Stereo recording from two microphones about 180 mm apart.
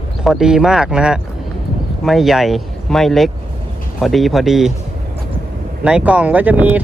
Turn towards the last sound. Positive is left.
turn(degrees=-10)  # may be behind; listen again after turning